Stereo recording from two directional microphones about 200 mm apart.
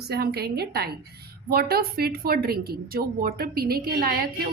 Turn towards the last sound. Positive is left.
turn(degrees=-50)  # may be behind; listen again after turning